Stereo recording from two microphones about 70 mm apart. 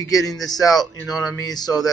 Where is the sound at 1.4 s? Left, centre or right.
Left.